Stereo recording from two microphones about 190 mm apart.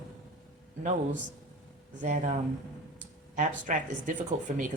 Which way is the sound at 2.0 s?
40° right (ahead or behind).